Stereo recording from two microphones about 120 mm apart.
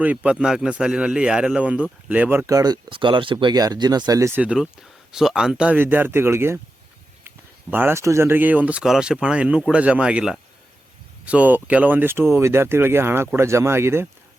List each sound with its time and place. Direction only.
0.0 s speech: 10° right (ahead or behind)
2.5 s speech: 30° right (ahead or behind)
2.9 s speech: 45° right (ahead or behind)
3.4 s speech: 35° right (ahead or behind)
4.4 s speech: 5° right (ahead or behind)